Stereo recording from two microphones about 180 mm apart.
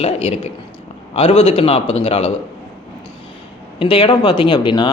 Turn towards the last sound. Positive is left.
turn(degrees=25)  # may be behind; listen again after turning